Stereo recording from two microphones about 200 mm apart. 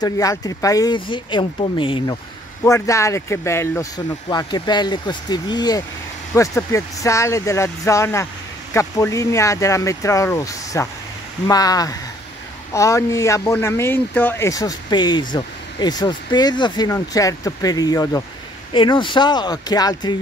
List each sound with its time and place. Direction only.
0.0 s speech: 15° left (ahead or behind)
2.6 s speech: 15° left (ahead or behind)